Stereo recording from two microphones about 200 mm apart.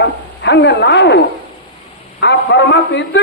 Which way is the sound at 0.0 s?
60° left (ahead or behind).